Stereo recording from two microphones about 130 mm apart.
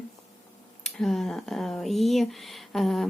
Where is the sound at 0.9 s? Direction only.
Centre (ahead or behind).